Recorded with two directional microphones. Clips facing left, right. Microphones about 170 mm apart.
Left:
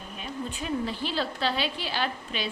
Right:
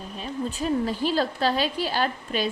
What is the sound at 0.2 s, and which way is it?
A woman's voice, 40° right (ahead or behind).